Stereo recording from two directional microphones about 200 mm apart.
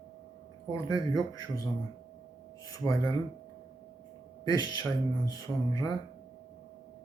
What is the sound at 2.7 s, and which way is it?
Speech, 20° left (ahead or behind).